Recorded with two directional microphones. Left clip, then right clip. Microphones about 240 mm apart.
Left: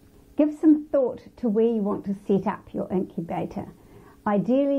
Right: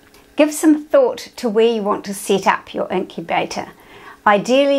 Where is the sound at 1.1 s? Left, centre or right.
Centre.